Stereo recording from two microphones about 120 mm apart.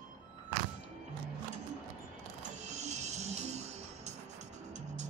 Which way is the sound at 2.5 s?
75° right (ahead or behind).